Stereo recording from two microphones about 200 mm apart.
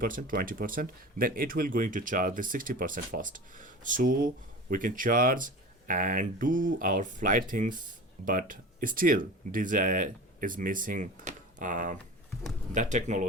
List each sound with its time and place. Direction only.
0.0 s speech: 45° right (ahead or behind)